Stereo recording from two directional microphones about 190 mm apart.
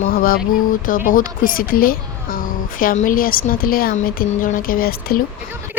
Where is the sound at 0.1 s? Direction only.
50° left (ahead or behind).